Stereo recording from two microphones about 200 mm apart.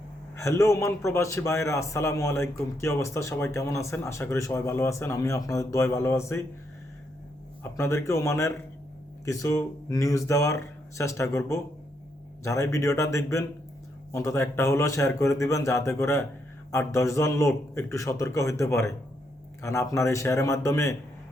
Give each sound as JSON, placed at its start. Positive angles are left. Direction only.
{"t": 0.3, "sound": "a man's voice", "side_deg": 15}
{"t": 7.6, "sound": "a man's voice", "side_deg": 15}